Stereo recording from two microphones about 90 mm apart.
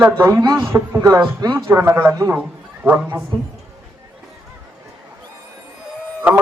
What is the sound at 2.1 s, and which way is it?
Speech, 35° right (ahead or behind).